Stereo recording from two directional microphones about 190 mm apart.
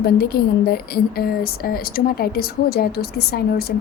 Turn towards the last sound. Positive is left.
turn(degrees=55)  # may be behind; listen again after turning